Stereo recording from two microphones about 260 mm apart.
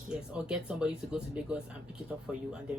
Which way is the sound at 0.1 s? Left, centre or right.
Centre.